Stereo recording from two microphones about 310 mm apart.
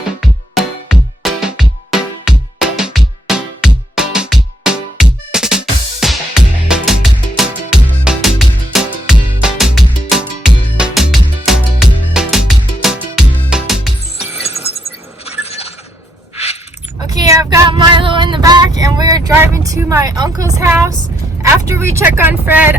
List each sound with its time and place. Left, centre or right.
0.2 s music: centre
15.2 s a sound: centre
17.2 s child singing: centre
18.8 s vehicle: centre